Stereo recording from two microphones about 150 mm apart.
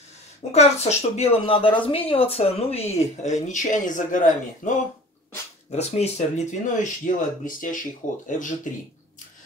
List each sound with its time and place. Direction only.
0.5 s speech: 45° left (ahead or behind)
5.7 s speech: 45° left (ahead or behind)